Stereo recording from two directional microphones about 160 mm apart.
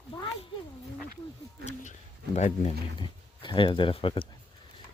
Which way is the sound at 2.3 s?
50° left (ahead or behind).